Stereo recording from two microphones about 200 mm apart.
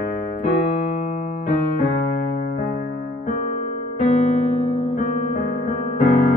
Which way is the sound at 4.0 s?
35° left (ahead or behind).